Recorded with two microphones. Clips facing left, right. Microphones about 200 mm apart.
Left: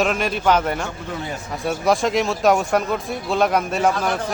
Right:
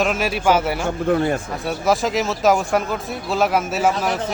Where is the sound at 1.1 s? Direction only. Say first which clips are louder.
Right 15 dB; 55° right (ahead or behind).